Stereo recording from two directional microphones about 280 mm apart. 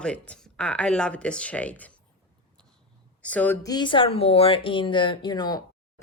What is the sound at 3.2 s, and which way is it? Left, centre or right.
Speech, centre.